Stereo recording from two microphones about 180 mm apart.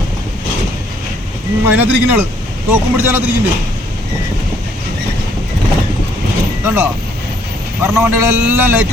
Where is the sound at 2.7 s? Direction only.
10° right (ahead or behind).